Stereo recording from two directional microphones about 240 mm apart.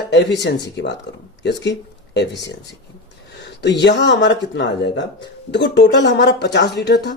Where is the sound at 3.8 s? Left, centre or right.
Left.